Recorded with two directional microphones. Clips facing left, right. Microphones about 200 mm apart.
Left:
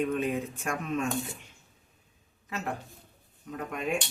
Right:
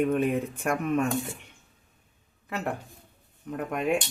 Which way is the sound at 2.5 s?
60° right (ahead or behind).